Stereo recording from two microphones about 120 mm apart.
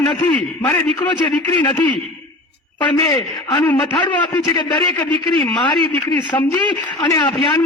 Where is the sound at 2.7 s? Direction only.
40° left (ahead or behind).